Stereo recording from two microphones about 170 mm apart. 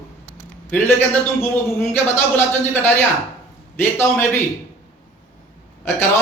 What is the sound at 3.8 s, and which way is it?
Speech, 15° left (ahead or behind).